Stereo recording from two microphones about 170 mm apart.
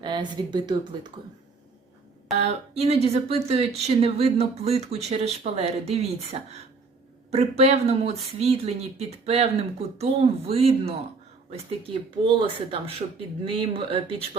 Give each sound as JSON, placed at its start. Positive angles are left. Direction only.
{"t": 0.0, "sound": "speech", "side_deg": -25}
{"t": 2.3, "sound": "speech", "side_deg": -40}
{"t": 12.2, "sound": "speech", "side_deg": -30}